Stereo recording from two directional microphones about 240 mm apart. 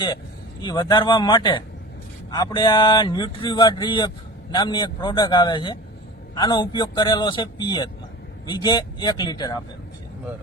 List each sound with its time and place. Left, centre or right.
0.6 s a man's voice: centre